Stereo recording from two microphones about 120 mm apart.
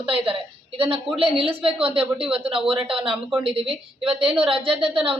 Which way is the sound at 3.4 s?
50° right (ahead or behind).